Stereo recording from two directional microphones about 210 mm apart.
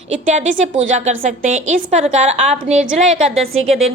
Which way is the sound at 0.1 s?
35° right (ahead or behind).